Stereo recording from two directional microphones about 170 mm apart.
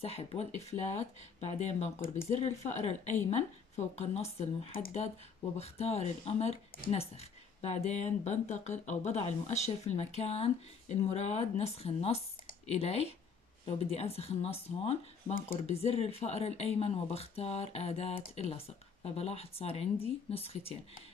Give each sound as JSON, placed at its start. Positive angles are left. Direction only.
{"t": 0.0, "sound": "speech", "side_deg": 35}